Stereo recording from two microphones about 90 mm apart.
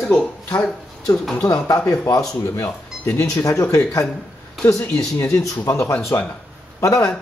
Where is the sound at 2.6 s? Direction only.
30° left (ahead or behind).